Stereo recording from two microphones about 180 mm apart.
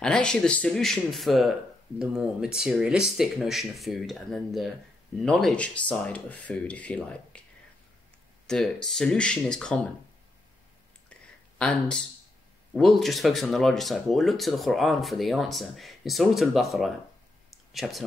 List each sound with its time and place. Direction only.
0.0 s speech: 5° left (ahead or behind)
8.5 s speech: 5° left (ahead or behind)
11.1 s a sound: 5° left (ahead or behind)
12.7 s speech: centre (ahead or behind)